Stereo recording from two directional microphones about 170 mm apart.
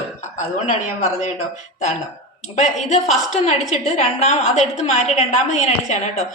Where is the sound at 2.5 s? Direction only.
45° left (ahead or behind).